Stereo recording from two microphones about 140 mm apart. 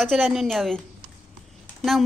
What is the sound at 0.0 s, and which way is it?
A woman's voice, centre (ahead or behind).